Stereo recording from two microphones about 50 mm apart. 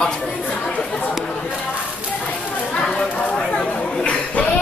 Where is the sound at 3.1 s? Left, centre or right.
Left.